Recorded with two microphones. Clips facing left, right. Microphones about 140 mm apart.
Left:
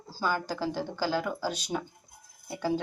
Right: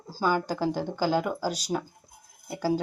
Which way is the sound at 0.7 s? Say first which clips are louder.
Right 4 dB; 15° right (ahead or behind).